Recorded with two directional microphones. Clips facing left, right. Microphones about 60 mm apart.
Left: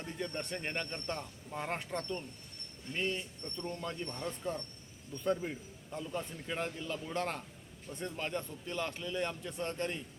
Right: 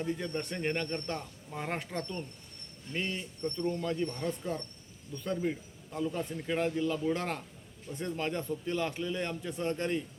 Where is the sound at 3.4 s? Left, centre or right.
Right.